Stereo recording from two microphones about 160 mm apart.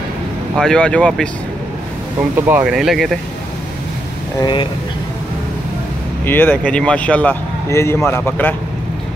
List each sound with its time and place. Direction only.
0.6 s speech: 5° left (ahead or behind)
2.3 s speech: 10° right (ahead or behind)
4.4 s speech: 30° left (ahead or behind)
6.2 s speech: 10° left (ahead or behind)